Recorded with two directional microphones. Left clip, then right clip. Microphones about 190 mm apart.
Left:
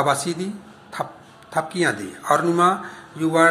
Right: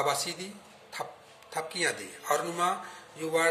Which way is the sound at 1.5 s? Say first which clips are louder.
Left 9 dB; 5° right (ahead or behind).